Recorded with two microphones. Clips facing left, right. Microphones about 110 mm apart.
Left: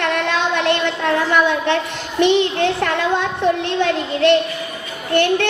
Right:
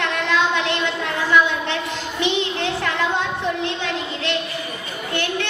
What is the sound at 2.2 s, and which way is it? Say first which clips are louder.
A child's voice: left 8 dB; 55° left (ahead or behind).